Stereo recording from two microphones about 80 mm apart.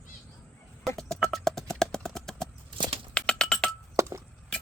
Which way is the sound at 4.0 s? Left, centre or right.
Right.